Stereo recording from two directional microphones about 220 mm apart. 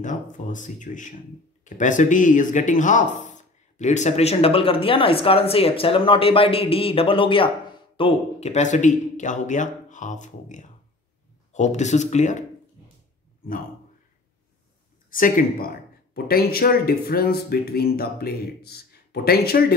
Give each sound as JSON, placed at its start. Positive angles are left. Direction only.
{"t": 0.0, "sound": "a man's voice", "side_deg": 35}
{"t": 15.0, "sound": "a man's voice", "side_deg": 40}